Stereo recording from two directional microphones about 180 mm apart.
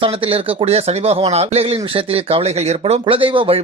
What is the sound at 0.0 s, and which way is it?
Speech, 30° right (ahead or behind).